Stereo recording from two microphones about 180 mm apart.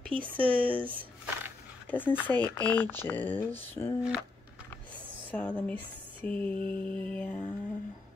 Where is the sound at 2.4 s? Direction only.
10° left (ahead or behind).